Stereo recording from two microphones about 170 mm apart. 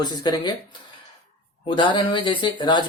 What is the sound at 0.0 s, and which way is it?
Speech, 25° left (ahead or behind).